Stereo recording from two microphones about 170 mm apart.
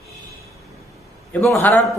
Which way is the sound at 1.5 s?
10° left (ahead or behind).